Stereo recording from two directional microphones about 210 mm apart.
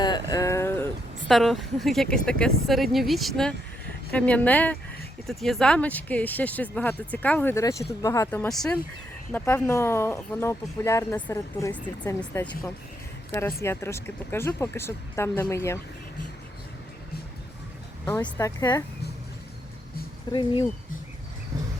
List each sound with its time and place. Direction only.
0.0 s a sound: 20° left (ahead or behind)
1.3 s speech: centre (ahead or behind)
13.6 s speech: 10° left (ahead or behind)
18.0 s speech: 15° left (ahead or behind)
20.3 s speech: 25° left (ahead or behind)